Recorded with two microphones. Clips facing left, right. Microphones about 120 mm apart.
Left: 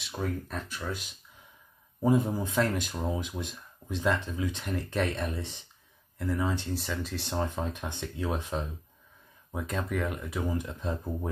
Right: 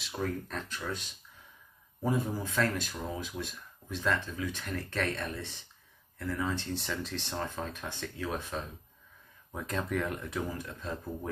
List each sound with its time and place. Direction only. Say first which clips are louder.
0.0 s speech: left 1 dB; 5° left (ahead or behind)
2.0 s speech: left 6 dB; 20° left (ahead or behind)
6.8 s speech: left 2 dB; centre (ahead or behind)
7.2 s speech: left 7 dB; 15° left (ahead or behind)
9.5 s speech: left 1 dB; 5° left (ahead or behind)
10.5 s speech: left 5 dB; 15° left (ahead or behind)